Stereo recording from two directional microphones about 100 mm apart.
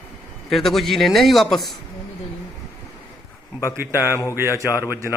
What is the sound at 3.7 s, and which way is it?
A man's voice, 20° right (ahead or behind).